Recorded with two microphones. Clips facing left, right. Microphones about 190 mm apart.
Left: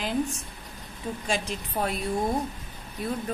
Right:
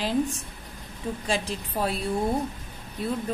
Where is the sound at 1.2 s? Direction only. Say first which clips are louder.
Right 1 dB; 35° right (ahead or behind).